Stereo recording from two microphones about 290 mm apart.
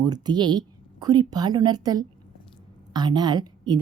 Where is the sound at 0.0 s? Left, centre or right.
Centre.